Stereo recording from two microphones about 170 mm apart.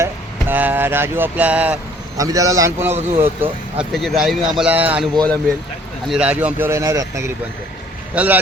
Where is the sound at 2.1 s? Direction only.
20° right (ahead or behind).